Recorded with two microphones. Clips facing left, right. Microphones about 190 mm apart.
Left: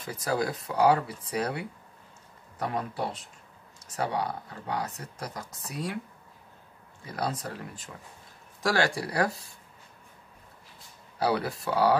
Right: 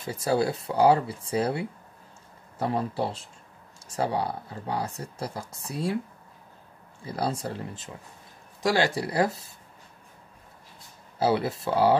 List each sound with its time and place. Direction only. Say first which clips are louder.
0.0 s speech: right 4 dB; 25° right (ahead or behind)
7.1 s speech: right 3 dB; 30° right (ahead or behind)
11.1 s speech: right 3 dB; 25° right (ahead or behind)